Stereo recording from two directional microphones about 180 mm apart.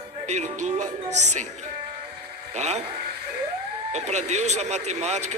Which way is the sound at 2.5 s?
40° right (ahead or behind).